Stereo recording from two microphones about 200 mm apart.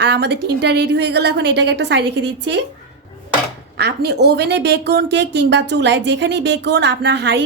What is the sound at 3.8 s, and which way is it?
A woman's voice, 55° right (ahead or behind).